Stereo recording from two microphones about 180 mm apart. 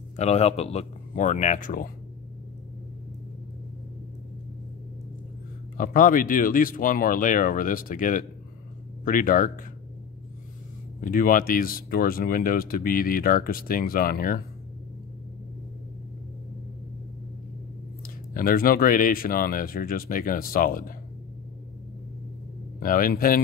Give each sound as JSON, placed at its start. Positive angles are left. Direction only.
{"t": 0.1, "sound": "speech", "side_deg": 35}
{"t": 5.8, "sound": "speech", "side_deg": 50}
{"t": 11.0, "sound": "speech", "side_deg": 50}
{"t": 18.0, "sound": "speech", "side_deg": 55}
{"t": 22.8, "sound": "speech", "side_deg": 50}